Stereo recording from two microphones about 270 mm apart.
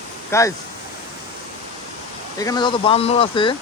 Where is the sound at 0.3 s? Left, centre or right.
Centre.